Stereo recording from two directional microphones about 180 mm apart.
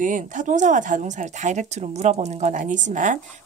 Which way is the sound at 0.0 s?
45° right (ahead or behind).